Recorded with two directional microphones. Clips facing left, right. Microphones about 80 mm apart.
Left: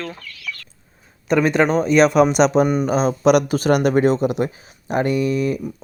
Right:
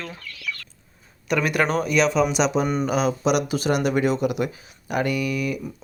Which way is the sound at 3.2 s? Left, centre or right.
Left.